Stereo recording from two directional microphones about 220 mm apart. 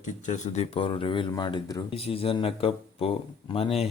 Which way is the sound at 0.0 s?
35° left (ahead or behind).